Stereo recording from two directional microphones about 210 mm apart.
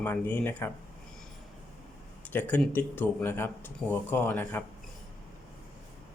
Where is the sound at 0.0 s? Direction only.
10° left (ahead or behind).